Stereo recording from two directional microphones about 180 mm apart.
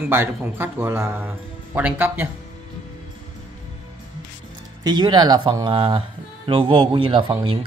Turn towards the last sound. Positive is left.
turn(degrees=-30)  # may be behind; listen again after turning